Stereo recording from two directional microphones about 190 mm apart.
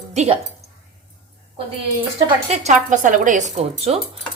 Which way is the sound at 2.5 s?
40° right (ahead or behind).